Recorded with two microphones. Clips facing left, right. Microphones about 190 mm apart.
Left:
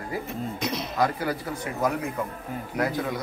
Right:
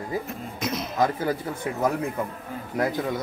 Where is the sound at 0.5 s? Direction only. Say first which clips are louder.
Right 3 dB; centre (ahead or behind).